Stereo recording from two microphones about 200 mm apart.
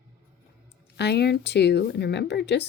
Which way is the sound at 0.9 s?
55° left (ahead or behind).